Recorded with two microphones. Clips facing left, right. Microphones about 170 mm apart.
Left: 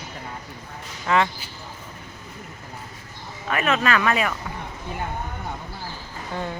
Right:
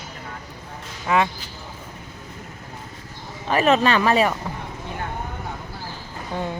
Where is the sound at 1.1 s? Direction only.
15° right (ahead or behind).